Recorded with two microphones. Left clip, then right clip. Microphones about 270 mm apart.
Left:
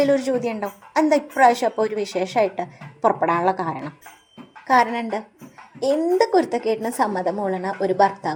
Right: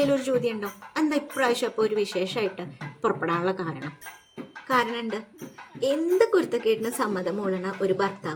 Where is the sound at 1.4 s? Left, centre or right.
Centre.